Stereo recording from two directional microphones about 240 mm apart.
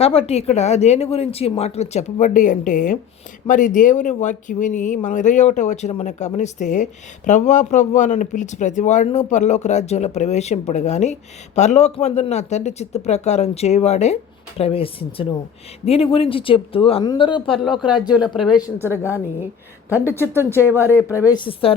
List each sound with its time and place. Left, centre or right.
0.0 s speech: left
17.7 s speech: centre
21.1 s a woman's voice: centre